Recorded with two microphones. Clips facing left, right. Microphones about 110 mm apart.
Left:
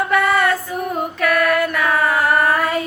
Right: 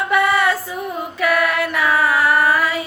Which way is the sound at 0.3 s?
50° left (ahead or behind).